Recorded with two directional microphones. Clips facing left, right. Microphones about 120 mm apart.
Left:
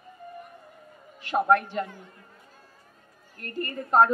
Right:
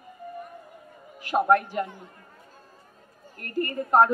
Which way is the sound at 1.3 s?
20° right (ahead or behind).